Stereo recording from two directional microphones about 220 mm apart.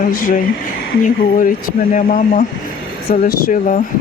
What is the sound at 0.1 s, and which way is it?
Speech, 40° left (ahead or behind).